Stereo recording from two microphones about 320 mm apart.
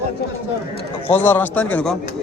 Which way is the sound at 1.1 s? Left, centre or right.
Centre.